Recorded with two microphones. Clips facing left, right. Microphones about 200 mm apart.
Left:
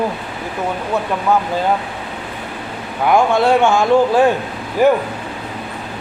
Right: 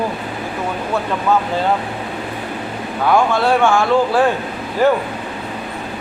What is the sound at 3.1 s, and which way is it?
Speech, 20° left (ahead or behind).